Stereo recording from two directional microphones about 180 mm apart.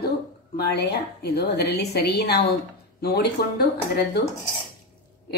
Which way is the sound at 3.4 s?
60° left (ahead or behind).